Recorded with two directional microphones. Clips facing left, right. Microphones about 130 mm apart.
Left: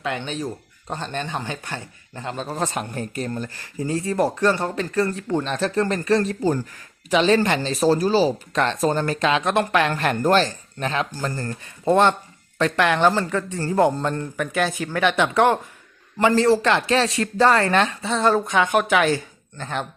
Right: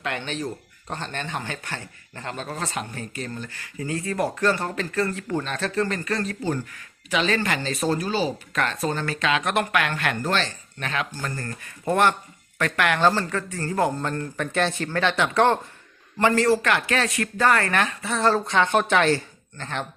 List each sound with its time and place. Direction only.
0.0 s speech: 15° left (ahead or behind)
2.6 s speech: 40° left (ahead or behind); by 5.5 s 25° left (ahead or behind)
5.7 s speech: 35° left (ahead or behind)
8.9 s speech: 45° left (ahead or behind)
9.4 s speech: 25° left (ahead or behind)
14.3 s speech: 10° left (ahead or behind)